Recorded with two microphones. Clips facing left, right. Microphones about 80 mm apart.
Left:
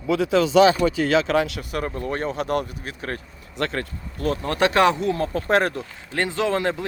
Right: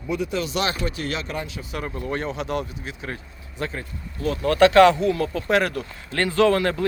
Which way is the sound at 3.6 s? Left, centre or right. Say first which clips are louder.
Left 4 dB; left.